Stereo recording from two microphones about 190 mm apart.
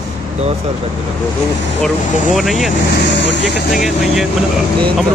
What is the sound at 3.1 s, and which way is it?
Speech, 65° left (ahead or behind).